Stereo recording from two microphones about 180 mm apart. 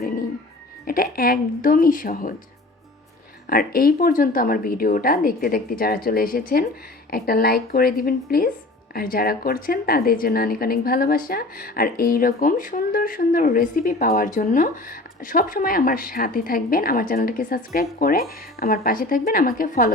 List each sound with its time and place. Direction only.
0.9 s speech: 55° left (ahead or behind)
3.5 s a woman's voice: 55° left (ahead or behind)